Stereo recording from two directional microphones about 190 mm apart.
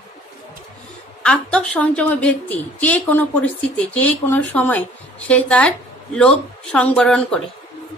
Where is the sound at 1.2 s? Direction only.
5° left (ahead or behind).